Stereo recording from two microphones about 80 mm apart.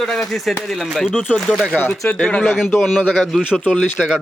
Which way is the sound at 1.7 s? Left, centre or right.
Right.